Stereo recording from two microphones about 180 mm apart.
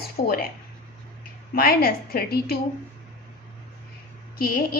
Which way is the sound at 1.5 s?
55° left (ahead or behind).